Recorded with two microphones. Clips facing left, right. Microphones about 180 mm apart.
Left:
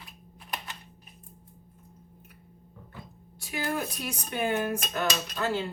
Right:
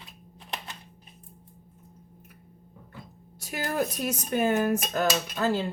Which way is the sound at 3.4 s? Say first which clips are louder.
Right 3 dB; 45° right (ahead or behind).